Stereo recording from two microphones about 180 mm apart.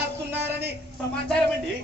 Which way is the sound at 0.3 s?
10° right (ahead or behind).